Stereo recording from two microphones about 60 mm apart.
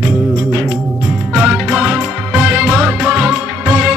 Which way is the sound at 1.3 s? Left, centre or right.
Centre.